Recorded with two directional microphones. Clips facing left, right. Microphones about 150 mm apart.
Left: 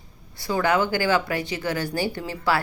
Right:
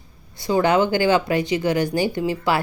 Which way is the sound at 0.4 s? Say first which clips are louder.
Right 4 dB; 20° right (ahead or behind).